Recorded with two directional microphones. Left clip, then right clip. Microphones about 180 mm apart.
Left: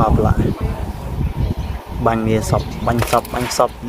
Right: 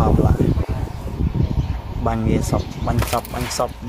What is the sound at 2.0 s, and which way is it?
Speech, centre (ahead or behind).